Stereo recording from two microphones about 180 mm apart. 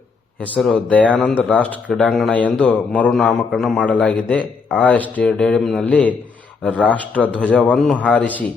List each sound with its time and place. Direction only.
0.3 s speech: 5° left (ahead or behind)